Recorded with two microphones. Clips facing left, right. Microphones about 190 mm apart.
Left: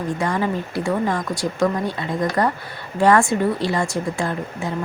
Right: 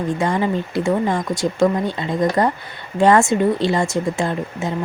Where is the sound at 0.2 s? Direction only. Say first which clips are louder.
Right 2 dB; 20° right (ahead or behind).